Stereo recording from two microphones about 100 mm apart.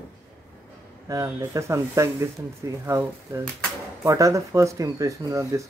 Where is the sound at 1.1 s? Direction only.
30° right (ahead or behind).